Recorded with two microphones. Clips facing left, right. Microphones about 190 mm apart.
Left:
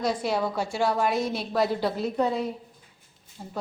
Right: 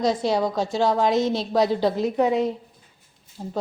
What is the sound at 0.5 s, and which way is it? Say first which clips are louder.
Speech: right 5 dB; 10° left (ahead or behind).